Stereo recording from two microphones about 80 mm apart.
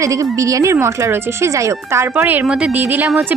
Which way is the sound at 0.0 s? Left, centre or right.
Right.